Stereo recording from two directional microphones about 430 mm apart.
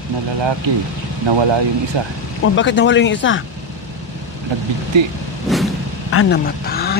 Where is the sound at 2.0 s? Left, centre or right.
Right.